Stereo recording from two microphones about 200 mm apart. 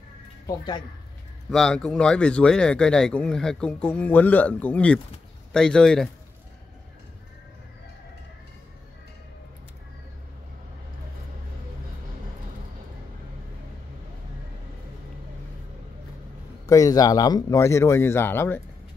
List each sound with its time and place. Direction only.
0.5 s a woman's voice: 20° left (ahead or behind)
1.5 s speech: 5° left (ahead or behind)
16.6 s speech: 15° left (ahead or behind)